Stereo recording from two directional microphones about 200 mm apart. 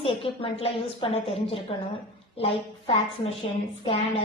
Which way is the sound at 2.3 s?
30° left (ahead or behind).